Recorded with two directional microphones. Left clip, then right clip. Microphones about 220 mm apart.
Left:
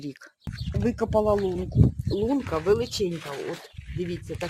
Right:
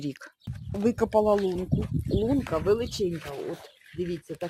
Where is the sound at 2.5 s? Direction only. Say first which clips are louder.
Left 2 dB; 15° right (ahead or behind).